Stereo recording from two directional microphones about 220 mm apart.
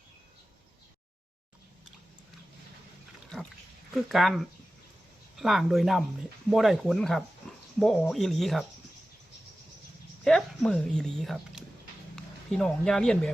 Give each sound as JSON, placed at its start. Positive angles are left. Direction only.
{"t": 3.9, "sound": "speech", "side_deg": 0}
{"t": 7.4, "sound": "dog", "side_deg": 5}
{"t": 7.8, "sound": "speech", "side_deg": 0}
{"t": 10.2, "sound": "speech", "side_deg": 0}